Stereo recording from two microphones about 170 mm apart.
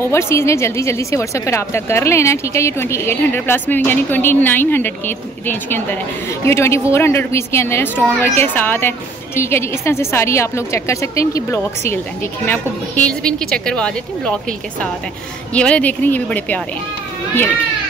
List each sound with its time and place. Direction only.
0.0 s a woman's voice: 15° left (ahead or behind)
15.5 s a woman's voice: 5° left (ahead or behind)